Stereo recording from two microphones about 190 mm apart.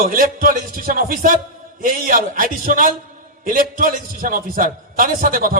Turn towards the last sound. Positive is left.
turn(degrees=-50)  # may be behind; listen again after turning